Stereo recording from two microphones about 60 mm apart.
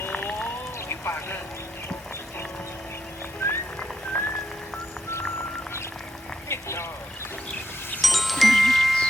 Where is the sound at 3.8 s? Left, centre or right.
Centre.